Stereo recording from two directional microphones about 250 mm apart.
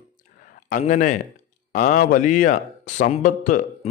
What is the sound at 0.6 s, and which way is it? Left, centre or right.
A man's voice, left.